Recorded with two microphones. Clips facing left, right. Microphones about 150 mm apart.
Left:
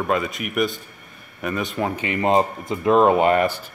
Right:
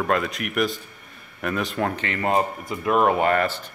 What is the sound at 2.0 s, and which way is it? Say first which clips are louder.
Speech: left 6 dB; 15° left (ahead or behind).